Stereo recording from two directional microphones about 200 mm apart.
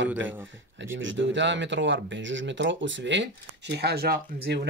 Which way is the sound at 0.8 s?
70° right (ahead or behind).